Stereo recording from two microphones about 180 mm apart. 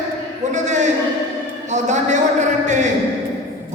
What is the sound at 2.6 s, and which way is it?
Speech, 40° right (ahead or behind).